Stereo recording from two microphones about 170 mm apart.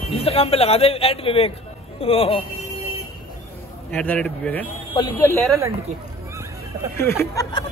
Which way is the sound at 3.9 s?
10° left (ahead or behind).